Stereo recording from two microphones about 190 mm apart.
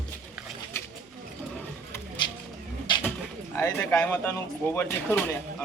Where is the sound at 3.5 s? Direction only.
15° left (ahead or behind).